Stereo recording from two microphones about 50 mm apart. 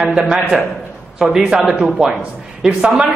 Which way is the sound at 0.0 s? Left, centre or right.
Centre.